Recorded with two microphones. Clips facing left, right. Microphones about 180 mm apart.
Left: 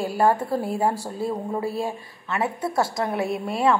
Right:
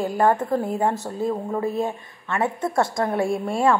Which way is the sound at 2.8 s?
25° left (ahead or behind).